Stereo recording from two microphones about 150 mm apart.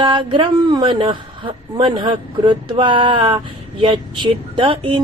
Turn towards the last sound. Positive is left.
turn(degrees=-35)  # may be behind; listen again after turning